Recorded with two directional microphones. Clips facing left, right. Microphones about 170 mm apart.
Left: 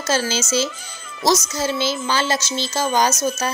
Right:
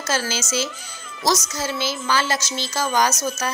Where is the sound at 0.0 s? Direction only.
25° left (ahead or behind).